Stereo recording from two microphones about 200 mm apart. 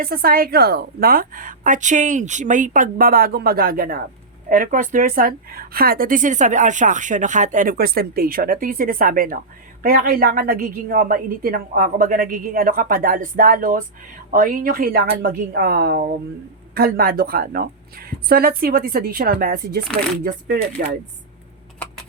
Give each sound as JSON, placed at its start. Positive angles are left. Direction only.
{"t": 0.0, "sound": "a woman's voice", "side_deg": -50}